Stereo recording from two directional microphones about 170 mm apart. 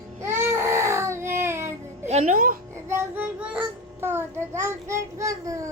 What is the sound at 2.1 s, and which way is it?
Speech, 40° right (ahead or behind).